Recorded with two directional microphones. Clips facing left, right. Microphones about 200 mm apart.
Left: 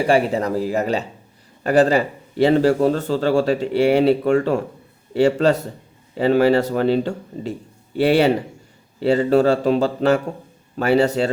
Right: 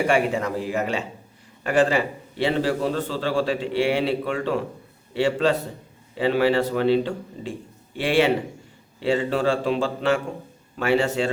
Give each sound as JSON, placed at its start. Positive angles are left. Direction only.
{"t": 0.1, "sound": "a man's voice", "side_deg": 35}